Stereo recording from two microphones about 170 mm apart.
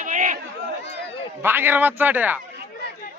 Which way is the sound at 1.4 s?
10° right (ahead or behind).